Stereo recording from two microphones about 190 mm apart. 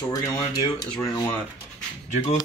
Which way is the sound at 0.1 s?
20° left (ahead or behind).